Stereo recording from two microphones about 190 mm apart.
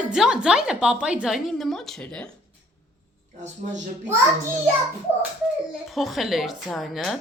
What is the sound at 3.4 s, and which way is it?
Speech, 40° right (ahead or behind).